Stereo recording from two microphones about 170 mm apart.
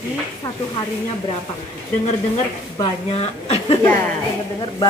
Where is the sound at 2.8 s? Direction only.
35° left (ahead or behind).